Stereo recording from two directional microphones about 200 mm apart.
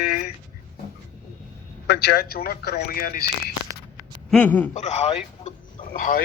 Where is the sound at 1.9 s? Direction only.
55° left (ahead or behind).